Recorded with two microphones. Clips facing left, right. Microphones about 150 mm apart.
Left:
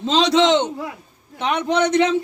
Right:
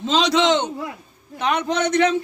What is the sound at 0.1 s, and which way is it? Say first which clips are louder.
Speech: left 2 dB; 25° left (ahead or behind).